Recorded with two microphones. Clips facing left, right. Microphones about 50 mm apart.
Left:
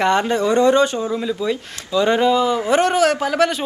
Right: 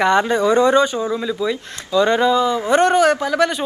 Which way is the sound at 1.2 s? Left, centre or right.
Centre.